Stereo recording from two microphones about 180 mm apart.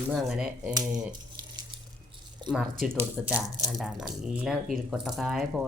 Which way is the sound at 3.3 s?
5° right (ahead or behind).